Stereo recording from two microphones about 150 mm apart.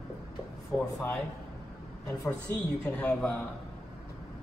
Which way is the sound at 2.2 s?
20° left (ahead or behind).